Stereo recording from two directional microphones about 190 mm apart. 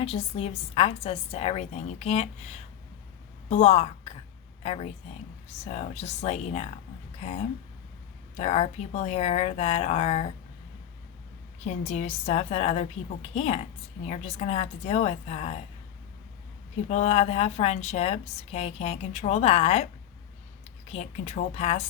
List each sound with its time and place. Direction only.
0.0 s a woman's voice: 30° left (ahead or behind)
11.6 s a woman's voice: 35° left (ahead or behind)
16.9 s a woman's voice: 35° left (ahead or behind)